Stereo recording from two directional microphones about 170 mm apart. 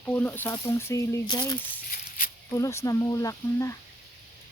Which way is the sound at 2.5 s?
20° left (ahead or behind).